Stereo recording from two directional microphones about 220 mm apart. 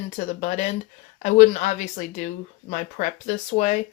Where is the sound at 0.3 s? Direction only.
35° left (ahead or behind).